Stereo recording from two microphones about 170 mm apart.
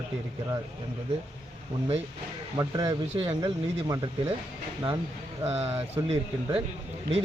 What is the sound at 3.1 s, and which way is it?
A man's voice, 35° right (ahead or behind).